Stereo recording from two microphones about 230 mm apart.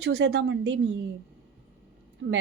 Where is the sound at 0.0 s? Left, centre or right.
Right.